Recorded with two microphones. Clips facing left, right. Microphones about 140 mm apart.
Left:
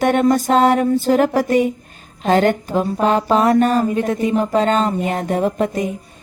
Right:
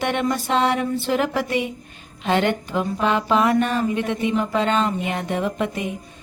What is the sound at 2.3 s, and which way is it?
Speech, 40° left (ahead or behind).